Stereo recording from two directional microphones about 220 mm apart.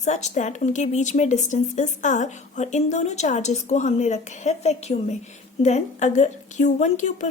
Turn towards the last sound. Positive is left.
turn(degrees=35)  # may be behind; listen again after turning